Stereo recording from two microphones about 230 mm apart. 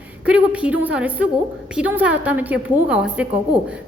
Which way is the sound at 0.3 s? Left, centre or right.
Centre.